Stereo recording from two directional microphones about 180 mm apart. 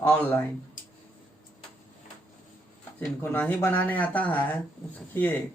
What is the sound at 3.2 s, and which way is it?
A man's voice, 10° left (ahead or behind).